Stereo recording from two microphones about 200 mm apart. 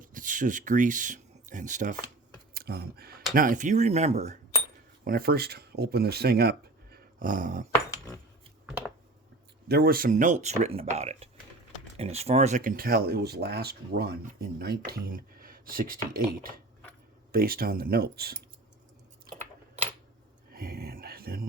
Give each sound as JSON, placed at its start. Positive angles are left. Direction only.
{"t": 0.0, "sound": "speech", "side_deg": -40}
{"t": 2.6, "sound": "speech", "side_deg": -50}
{"t": 5.0, "sound": "speech", "side_deg": -50}
{"t": 9.6, "sound": "speech", "side_deg": -50}
{"t": 20.5, "sound": "a sound", "side_deg": -50}